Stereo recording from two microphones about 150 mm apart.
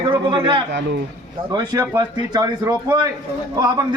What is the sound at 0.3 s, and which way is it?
A man's voice, 35° right (ahead or behind).